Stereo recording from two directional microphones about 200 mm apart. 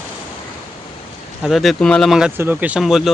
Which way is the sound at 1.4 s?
Centre (ahead or behind).